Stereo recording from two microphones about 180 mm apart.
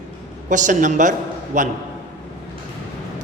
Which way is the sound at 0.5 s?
45° right (ahead or behind).